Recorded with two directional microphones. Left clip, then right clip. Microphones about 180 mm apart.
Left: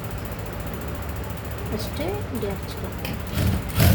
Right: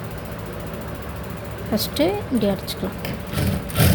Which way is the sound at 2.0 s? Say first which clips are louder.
Right 9 dB; 70° right (ahead or behind).